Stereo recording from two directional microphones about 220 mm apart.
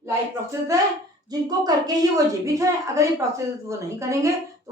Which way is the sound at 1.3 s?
20° right (ahead or behind).